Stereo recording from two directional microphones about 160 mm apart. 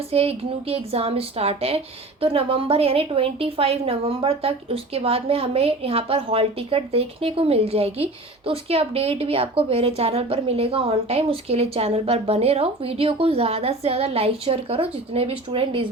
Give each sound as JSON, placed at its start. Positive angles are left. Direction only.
{"t": 0.1, "sound": "a woman's voice", "side_deg": -40}